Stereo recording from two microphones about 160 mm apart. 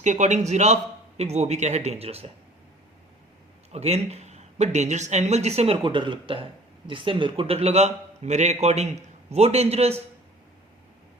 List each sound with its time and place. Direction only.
0.0 s speech: 50° right (ahead or behind)
3.7 s a man's voice: 40° right (ahead or behind)